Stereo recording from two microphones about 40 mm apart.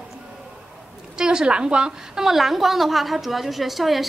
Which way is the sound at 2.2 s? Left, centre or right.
Centre.